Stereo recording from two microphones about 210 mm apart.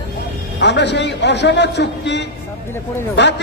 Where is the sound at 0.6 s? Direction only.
55° left (ahead or behind).